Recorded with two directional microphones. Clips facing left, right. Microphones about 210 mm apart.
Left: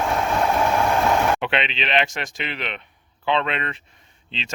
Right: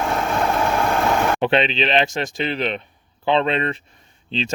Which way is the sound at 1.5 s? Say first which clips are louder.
Right 6 dB; 35° right (ahead or behind).